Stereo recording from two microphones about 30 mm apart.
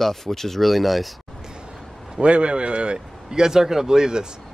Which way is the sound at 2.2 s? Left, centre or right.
Right.